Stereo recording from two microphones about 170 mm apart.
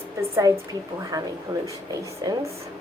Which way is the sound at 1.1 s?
20° right (ahead or behind).